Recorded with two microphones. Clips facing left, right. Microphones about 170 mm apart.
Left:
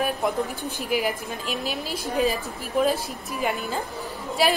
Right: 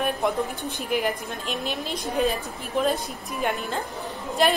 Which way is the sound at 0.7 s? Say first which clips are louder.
Even; 5° left (ahead or behind).